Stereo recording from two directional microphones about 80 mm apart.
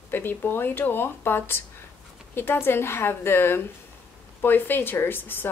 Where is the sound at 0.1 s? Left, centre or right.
Left.